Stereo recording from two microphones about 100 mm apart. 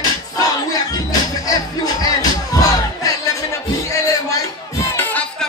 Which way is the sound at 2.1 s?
35° left (ahead or behind).